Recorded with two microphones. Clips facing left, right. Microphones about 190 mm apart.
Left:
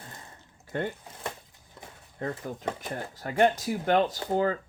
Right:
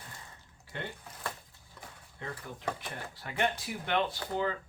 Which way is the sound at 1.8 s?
25° left (ahead or behind).